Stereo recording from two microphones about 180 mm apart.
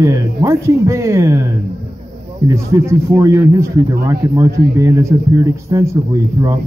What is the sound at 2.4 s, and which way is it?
Speech, 15° right (ahead or behind).